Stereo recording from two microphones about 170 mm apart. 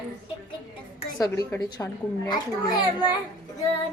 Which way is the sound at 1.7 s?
25° left (ahead or behind).